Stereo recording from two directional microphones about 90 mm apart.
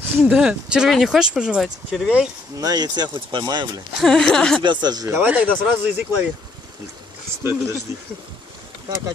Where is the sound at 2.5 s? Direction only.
45° right (ahead or behind).